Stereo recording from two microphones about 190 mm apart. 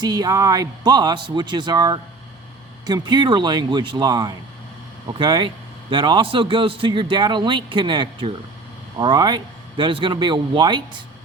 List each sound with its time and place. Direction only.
0.0 s a man's voice: 20° right (ahead or behind)